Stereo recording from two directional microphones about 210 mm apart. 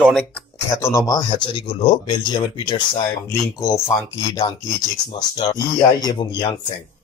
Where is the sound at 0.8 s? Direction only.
15° left (ahead or behind).